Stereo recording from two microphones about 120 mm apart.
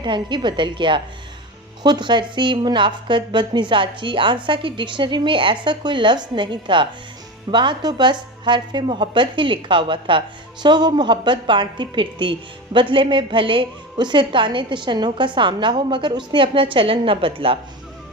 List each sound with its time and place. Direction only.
0.0 s a woman's voice: 40° right (ahead or behind)